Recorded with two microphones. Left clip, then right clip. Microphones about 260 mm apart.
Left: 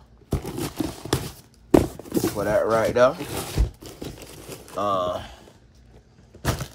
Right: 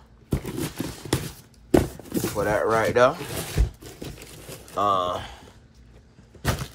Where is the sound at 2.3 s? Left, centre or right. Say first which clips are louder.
Even; centre.